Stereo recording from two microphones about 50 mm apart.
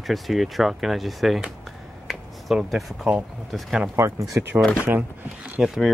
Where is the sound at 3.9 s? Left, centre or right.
Right.